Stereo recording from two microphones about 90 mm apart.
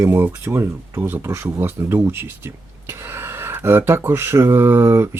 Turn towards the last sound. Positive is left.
turn(degrees=-30)  # may be behind; listen again after turning